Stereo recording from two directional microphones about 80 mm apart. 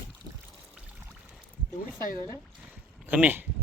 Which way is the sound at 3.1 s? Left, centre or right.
Centre.